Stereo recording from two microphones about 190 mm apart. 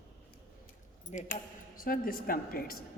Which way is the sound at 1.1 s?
40° left (ahead or behind).